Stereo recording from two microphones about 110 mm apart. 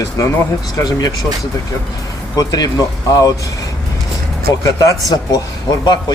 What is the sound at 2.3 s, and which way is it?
Speech, 35° left (ahead or behind).